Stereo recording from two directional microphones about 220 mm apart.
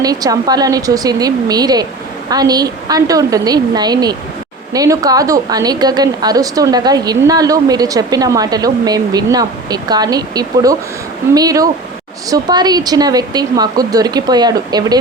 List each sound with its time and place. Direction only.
0.0 s a woman's voice: 15° right (ahead or behind)